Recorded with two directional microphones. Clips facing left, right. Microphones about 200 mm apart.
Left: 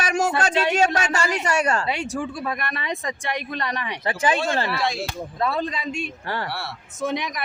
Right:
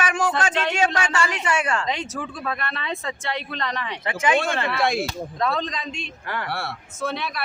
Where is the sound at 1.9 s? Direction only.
10° left (ahead or behind).